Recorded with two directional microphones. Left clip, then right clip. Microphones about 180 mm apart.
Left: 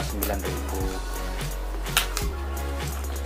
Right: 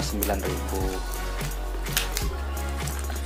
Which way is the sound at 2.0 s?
15° right (ahead or behind).